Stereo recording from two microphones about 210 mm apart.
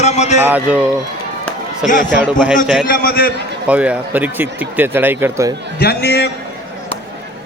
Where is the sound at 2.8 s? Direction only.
45° left (ahead or behind).